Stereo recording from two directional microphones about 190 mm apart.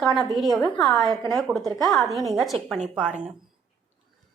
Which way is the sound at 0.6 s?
20° left (ahead or behind).